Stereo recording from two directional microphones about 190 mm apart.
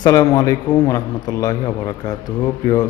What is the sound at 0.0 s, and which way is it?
A man's voice, 20° left (ahead or behind).